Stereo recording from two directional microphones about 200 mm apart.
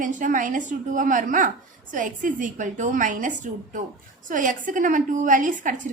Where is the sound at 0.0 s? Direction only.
40° right (ahead or behind).